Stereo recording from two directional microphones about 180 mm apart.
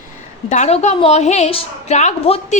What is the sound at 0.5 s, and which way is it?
A woman's voice, 40° left (ahead or behind).